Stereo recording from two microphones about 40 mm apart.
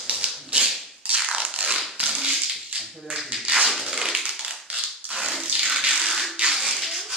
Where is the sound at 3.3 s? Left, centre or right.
Right.